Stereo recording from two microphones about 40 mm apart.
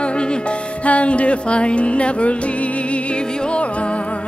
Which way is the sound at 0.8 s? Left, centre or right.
Left.